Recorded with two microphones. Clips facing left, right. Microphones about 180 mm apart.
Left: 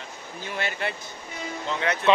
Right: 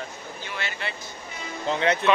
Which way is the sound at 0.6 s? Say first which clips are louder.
Left 5 dB; 50° left (ahead or behind).